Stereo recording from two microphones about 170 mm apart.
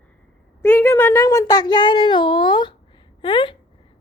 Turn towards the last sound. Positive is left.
turn(degrees=30)  # may be behind; listen again after turning